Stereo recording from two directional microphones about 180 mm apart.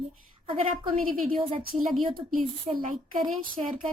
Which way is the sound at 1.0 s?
50° right (ahead or behind).